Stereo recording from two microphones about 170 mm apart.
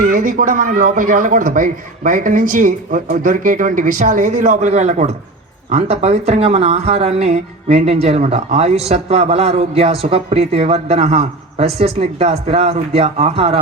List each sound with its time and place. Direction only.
0.0 s speech: 55° right (ahead or behind); by 13.6 s 35° right (ahead or behind)